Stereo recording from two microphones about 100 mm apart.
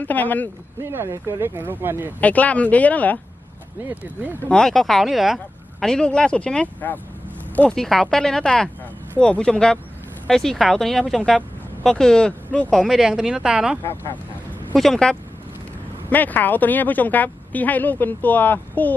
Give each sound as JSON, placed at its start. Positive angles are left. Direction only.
{"t": 0.0, "sound": "speech", "side_deg": 15}
{"t": 0.8, "sound": "speech", "side_deg": -25}
{"t": 2.2, "sound": "speech", "side_deg": 15}
{"t": 3.8, "sound": "speech", "side_deg": -15}
{"t": 4.4, "sound": "speech", "side_deg": 5}
{"t": 7.8, "sound": "speech", "side_deg": 5}
{"t": 12.7, "sound": "speech", "side_deg": 0}
{"t": 14.8, "sound": "speech", "side_deg": 5}
{"t": 16.0, "sound": "speech", "side_deg": 15}